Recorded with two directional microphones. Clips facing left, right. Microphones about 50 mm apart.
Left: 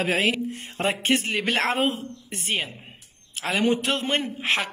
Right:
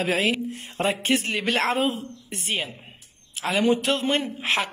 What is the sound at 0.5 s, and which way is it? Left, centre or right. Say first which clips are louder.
A man's voice: right 1 dB; left.